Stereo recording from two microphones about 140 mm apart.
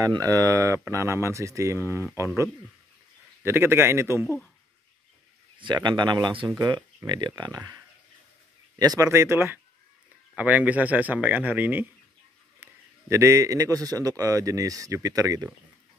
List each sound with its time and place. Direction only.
0.0 s a man's voice: 25° right (ahead or behind)
3.4 s speech: 15° right (ahead or behind)
5.6 s speech: 35° right (ahead or behind)
8.7 s a man's voice: 25° right (ahead or behind)
12.6 s a sound: 15° right (ahead or behind)
13.1 s a man's voice: 20° right (ahead or behind)